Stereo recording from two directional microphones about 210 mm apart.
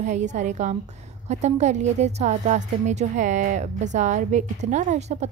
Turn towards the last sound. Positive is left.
turn(degrees=-35)  # may be behind; listen again after turning